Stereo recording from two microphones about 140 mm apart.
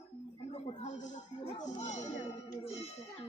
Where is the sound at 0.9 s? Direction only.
60° left (ahead or behind).